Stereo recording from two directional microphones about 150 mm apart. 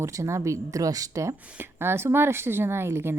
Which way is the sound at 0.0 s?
20° right (ahead or behind).